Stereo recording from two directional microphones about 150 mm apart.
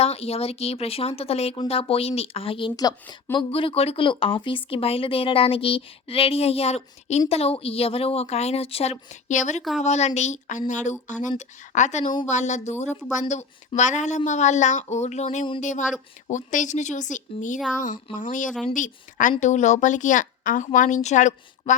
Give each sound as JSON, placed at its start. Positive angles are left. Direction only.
{"t": 0.0, "sound": "a woman's voice", "side_deg": 45}